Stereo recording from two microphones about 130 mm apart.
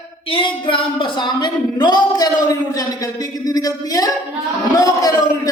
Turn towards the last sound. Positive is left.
turn(degrees=30)  # may be behind; listen again after turning